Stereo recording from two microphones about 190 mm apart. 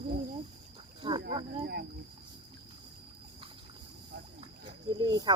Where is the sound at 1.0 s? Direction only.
25° right (ahead or behind).